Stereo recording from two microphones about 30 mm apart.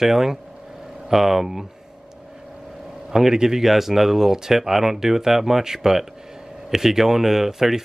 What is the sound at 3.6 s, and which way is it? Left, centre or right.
Speech, centre.